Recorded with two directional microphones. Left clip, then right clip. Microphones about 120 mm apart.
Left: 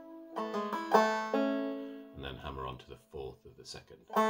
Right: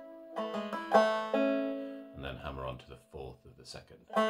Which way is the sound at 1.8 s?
15° left (ahead or behind).